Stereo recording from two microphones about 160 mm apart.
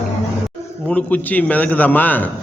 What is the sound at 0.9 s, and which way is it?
Speech, 10° left (ahead or behind).